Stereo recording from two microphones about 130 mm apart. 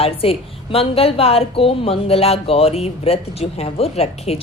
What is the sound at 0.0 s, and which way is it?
A woman's voice, 50° left (ahead or behind).